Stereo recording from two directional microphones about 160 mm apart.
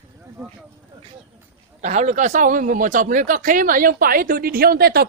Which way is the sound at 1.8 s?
45° right (ahead or behind).